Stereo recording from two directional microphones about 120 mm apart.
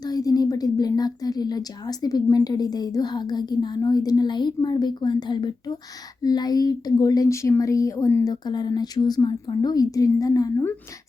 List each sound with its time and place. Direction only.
0.0 s speech: 30° left (ahead or behind)